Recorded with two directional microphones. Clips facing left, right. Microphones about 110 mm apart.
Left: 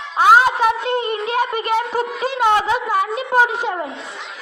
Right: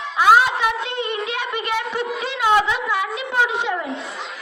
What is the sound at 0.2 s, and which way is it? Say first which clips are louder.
A woman's voice: left 2 dB; 35° left (ahead or behind).